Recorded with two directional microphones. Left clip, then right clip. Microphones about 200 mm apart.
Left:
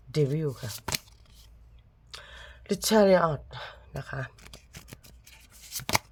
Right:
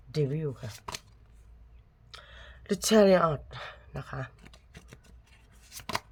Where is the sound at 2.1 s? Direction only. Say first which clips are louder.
Left 4 dB; 30° left (ahead or behind).